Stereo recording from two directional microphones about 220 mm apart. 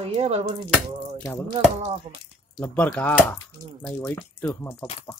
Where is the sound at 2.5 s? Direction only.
5° left (ahead or behind).